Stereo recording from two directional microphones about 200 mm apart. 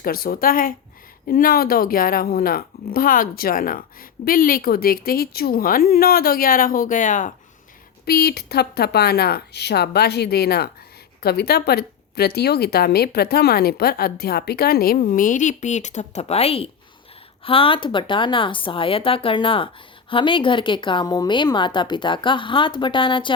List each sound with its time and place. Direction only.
0.0 s speech: 50° left (ahead or behind)
8.0 s a woman's voice: 50° left (ahead or behind); by 23.3 s 25° left (ahead or behind)